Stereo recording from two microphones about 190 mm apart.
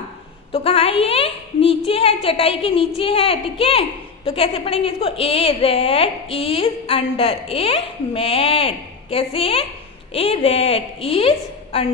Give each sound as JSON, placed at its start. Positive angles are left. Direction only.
{"t": 0.5, "sound": "a woman's voice", "side_deg": 30}